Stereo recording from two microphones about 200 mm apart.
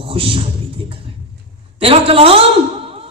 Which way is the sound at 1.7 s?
30° right (ahead or behind).